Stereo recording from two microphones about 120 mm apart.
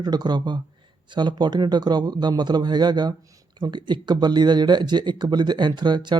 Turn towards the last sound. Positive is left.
turn(degrees=-40)  # may be behind; listen again after turning